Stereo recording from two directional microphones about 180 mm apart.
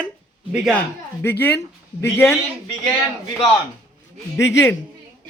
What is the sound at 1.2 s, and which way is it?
Speech, 10° left (ahead or behind).